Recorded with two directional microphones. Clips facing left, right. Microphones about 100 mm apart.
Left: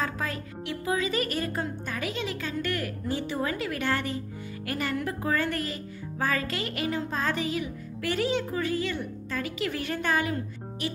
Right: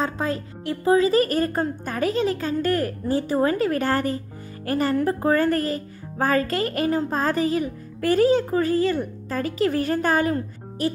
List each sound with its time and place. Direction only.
0.0 s speech: 30° right (ahead or behind)